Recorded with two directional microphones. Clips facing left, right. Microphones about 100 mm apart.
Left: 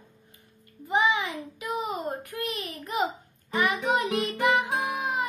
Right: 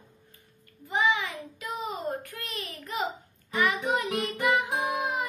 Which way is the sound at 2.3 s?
15° left (ahead or behind).